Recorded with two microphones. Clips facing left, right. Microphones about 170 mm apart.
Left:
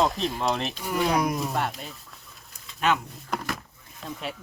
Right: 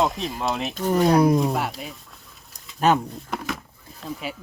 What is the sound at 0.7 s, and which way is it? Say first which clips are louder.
Speech: right 11 dB; 40° right (ahead or behind).